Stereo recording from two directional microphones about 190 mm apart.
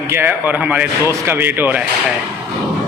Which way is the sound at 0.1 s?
10° right (ahead or behind).